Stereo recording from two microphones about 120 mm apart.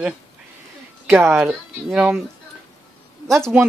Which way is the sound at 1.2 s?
15° right (ahead or behind).